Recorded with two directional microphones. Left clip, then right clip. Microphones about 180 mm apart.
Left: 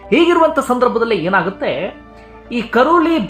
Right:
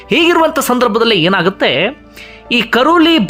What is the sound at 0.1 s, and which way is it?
Speech, 25° right (ahead or behind).